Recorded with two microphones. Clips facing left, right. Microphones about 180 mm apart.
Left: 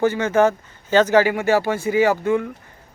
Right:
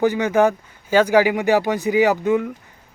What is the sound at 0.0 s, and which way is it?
Speech, 15° right (ahead or behind).